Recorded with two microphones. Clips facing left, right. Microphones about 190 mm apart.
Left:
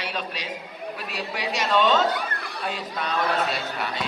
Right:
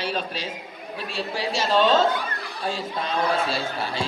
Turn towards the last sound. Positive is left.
turn(degrees=-30)  # may be behind; listen again after turning